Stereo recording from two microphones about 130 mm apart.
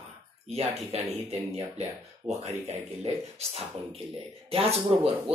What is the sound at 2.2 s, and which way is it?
Speech, 55° right (ahead or behind).